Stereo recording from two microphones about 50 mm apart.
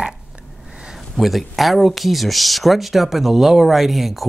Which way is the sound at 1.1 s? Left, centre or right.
Centre.